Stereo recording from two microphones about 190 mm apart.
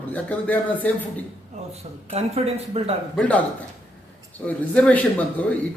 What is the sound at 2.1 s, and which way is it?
Speech, 35° right (ahead or behind).